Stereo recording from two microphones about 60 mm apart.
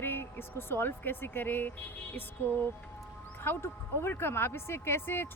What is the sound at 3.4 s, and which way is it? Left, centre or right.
Speech, left.